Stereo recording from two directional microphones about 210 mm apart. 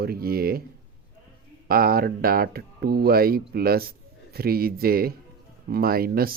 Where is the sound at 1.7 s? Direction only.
45° right (ahead or behind).